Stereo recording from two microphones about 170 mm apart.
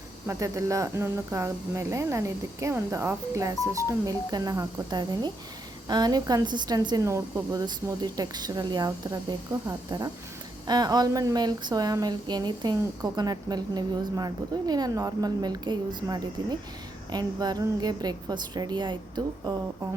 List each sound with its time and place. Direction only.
0.3 s speech: 20° right (ahead or behind)